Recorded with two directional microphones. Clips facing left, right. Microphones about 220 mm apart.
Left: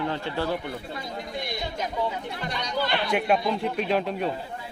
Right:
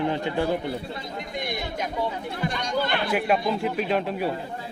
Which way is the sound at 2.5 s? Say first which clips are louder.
Even; 50° right (ahead or behind).